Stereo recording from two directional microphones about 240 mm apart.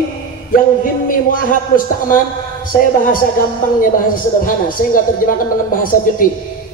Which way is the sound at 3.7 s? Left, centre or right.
Left.